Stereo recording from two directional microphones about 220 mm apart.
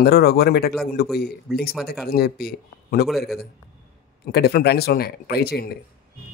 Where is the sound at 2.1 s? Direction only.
45° left (ahead or behind).